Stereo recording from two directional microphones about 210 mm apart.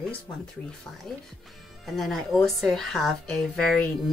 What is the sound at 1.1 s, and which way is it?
Speech, 5° left (ahead or behind).